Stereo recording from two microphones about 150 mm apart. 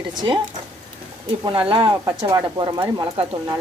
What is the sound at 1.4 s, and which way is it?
Speech, 35° right (ahead or behind).